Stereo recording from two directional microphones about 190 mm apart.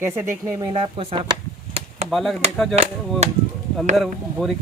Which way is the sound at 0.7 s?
30° right (ahead or behind).